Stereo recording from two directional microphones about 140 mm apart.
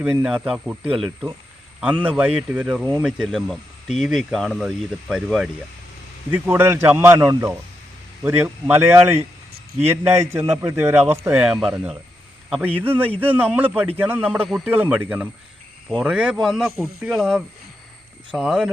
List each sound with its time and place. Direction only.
0.0 s a man's voice: 10° right (ahead or behind)
6.3 s a man's voice: 15° right (ahead or behind)
11.4 s a man's voice: 5° right (ahead or behind)
14.4 s speech: centre (ahead or behind)
14.7 s a man's voice: 15° right (ahead or behind)